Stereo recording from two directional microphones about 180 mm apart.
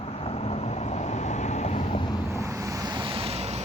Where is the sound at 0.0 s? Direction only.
35° left (ahead or behind).